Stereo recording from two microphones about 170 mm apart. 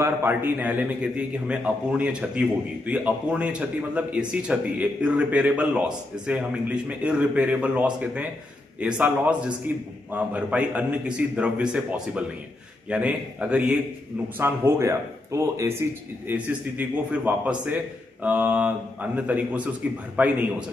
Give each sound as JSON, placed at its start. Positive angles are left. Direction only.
{"t": 0.0, "sound": "speech", "side_deg": -15}